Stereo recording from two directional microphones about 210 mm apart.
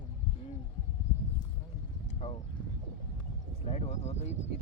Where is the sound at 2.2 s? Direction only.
30° left (ahead or behind).